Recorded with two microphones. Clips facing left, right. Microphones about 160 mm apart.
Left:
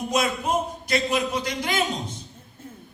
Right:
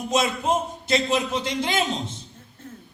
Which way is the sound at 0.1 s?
25° right (ahead or behind).